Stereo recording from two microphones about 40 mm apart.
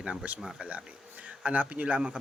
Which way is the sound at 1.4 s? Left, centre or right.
Right.